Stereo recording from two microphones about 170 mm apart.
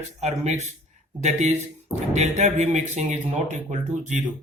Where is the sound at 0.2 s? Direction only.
40° right (ahead or behind).